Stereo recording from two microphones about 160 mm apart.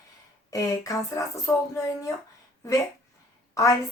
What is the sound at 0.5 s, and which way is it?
Speech, 20° left (ahead or behind).